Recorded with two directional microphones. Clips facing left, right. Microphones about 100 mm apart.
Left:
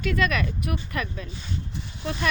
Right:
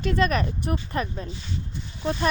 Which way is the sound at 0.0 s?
35° right (ahead or behind).